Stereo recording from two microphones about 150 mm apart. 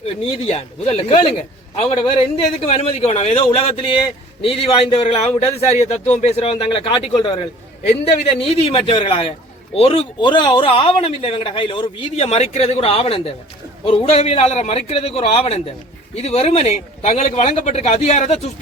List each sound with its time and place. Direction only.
0.2 s a man's voice: 40° left (ahead or behind)
7.9 s a man's voice: 40° left (ahead or behind)